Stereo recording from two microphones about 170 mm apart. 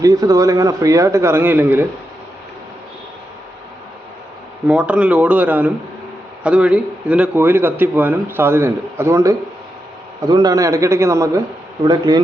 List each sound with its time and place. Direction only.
0.0 s a man's voice: 20° right (ahead or behind)
4.6 s a man's voice: 5° right (ahead or behind); by 12.2 s 25° right (ahead or behind)